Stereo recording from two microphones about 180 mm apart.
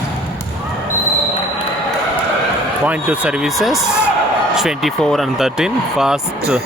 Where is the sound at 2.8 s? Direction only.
10° right (ahead or behind).